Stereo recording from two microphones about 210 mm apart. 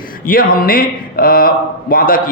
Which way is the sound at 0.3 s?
45° left (ahead or behind).